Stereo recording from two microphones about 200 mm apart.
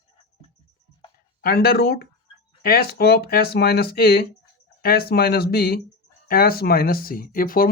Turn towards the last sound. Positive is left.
turn(degrees=45)  # may be behind; listen again after turning